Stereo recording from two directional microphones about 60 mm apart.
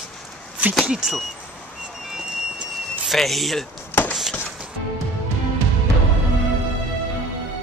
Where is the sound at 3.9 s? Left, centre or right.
Left.